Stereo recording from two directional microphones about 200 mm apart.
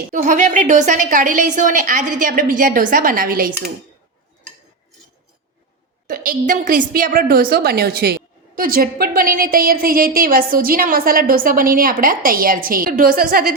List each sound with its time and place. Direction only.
0.1 s a woman's voice: 40° right (ahead or behind)
6.1 s a woman's voice: 40° right (ahead or behind)